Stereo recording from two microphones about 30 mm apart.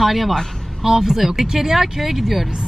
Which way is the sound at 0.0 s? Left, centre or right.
Centre.